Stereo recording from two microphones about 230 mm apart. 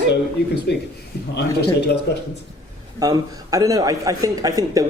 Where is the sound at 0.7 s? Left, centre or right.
Left.